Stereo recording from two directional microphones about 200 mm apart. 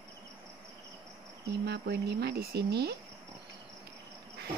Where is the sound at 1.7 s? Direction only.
55° right (ahead or behind).